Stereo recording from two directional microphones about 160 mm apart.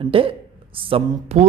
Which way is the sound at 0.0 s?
35° right (ahead or behind).